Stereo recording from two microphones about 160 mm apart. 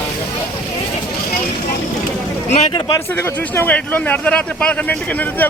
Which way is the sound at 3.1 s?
15° left (ahead or behind).